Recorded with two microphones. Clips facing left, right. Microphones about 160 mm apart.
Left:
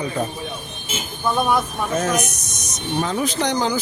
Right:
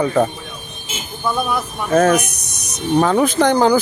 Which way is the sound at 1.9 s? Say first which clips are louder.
Right 9 dB; 60° right (ahead or behind).